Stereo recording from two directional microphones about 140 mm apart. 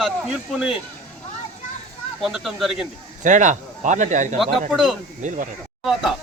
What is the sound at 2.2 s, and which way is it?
Speech, centre (ahead or behind).